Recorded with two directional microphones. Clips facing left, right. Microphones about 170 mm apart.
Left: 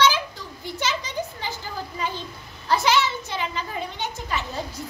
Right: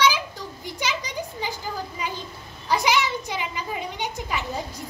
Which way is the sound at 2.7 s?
15° right (ahead or behind).